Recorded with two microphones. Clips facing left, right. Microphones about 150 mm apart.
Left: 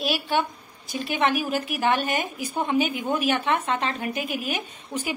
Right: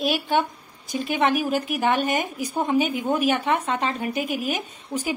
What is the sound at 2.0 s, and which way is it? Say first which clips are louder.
Speech: right 3 dB; 20° right (ahead or behind).